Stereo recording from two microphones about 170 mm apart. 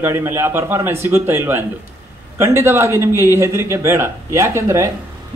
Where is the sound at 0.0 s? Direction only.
15° right (ahead or behind).